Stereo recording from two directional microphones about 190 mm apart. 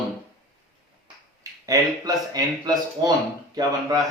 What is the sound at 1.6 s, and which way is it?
Speech, 20° right (ahead or behind).